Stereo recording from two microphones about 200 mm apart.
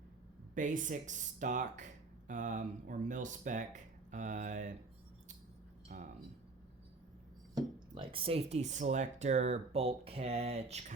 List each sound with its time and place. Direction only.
0.5 s speech: 40° right (ahead or behind)
5.9 s speech: 40° right (ahead or behind)
7.5 s speech: 25° right (ahead or behind)